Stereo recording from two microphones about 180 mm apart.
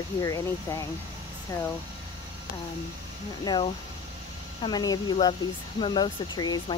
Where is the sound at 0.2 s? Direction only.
15° left (ahead or behind).